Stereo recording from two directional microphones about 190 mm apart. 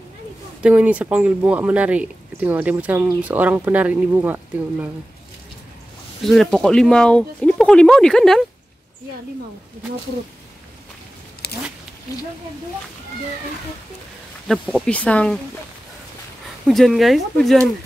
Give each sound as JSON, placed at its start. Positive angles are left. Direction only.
{"t": 0.6, "sound": "speech", "side_deg": -5}
{"t": 6.2, "sound": "speech", "side_deg": 0}
{"t": 11.4, "sound": "a sound", "side_deg": 55}
{"t": 14.5, "sound": "speech", "side_deg": 5}
{"t": 16.6, "sound": "speech", "side_deg": 0}